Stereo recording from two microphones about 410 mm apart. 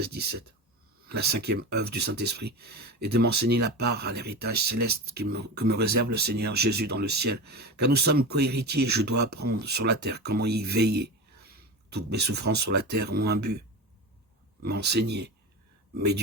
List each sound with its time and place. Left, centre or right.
0.0 s speech: right
14.6 s speech: right